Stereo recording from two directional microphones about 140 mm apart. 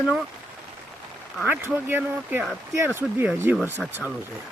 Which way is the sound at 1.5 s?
15° right (ahead or behind).